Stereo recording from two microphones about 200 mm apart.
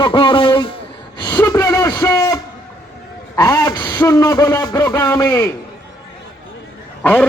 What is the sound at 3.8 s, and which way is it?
A man's voice, 10° left (ahead or behind).